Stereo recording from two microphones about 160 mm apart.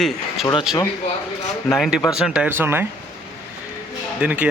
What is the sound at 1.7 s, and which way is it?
Speech, centre (ahead or behind).